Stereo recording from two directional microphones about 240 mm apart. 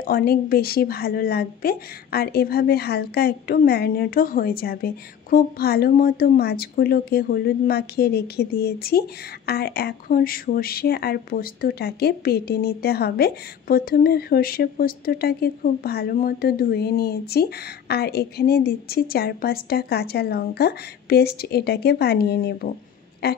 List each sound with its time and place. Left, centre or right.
0.0 s a woman's voice: left